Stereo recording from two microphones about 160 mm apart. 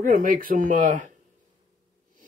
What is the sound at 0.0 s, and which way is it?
Speech, 55° right (ahead or behind).